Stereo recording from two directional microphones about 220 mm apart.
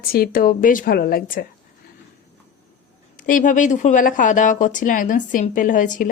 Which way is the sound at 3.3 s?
35° left (ahead or behind).